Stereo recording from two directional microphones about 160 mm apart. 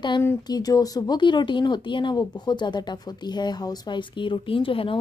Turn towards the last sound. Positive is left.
turn(degrees=35)  # may be behind; listen again after turning